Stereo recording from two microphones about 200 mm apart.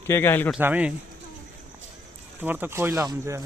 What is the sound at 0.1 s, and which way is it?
Speech, 10° left (ahead or behind).